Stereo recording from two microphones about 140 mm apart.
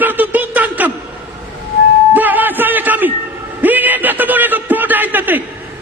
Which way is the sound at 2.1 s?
15° right (ahead or behind).